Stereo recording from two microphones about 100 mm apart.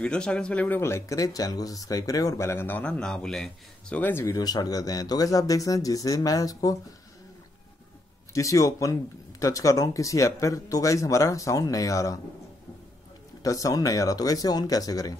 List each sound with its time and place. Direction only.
0.0 s speech: 10° left (ahead or behind)
0.7 s speech: 25° left (ahead or behind); by 4.0 s 5° left (ahead or behind)
4.0 s speech: 25° left (ahead or behind)
4.4 s speech: 40° left (ahead or behind)
8.3 s speech: 35° left (ahead or behind)
13.4 s speech: 35° left (ahead or behind)